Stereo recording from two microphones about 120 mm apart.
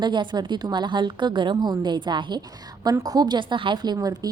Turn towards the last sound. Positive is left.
turn(degrees=-30)  # may be behind; listen again after turning